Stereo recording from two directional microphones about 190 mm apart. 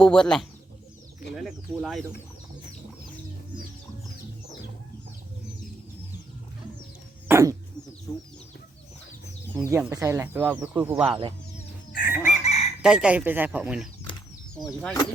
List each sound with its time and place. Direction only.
0.0 s speech: 5° left (ahead or behind)
7.3 s a sound: 15° right (ahead or behind)
9.6 s speech: 15° right (ahead or behind)
11.1 s speech: 30° right (ahead or behind)
11.9 s goose: 45° left (ahead or behind)
12.2 s chicken: 35° left (ahead or behind)
12.8 s speech: 5° right (ahead or behind)